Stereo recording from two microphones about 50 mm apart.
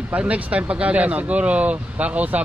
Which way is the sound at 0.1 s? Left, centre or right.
Right.